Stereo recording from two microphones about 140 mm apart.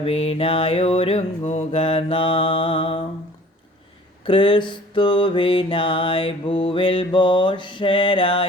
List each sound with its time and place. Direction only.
0.0 s mantra: 45° left (ahead or behind)
4.3 s mantra: 35° left (ahead or behind)